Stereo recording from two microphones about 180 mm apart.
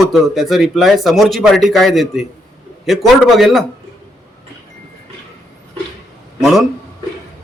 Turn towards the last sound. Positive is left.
turn(degrees=0)  # may be behind; listen again after turning